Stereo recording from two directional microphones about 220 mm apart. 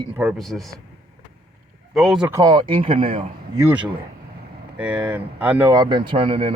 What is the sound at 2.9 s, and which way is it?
Speech, 35° right (ahead or behind).